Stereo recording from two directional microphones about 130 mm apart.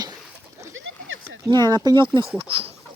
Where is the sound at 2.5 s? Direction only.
45° right (ahead or behind).